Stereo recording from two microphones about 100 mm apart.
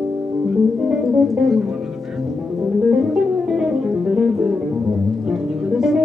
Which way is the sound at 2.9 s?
5° right (ahead or behind).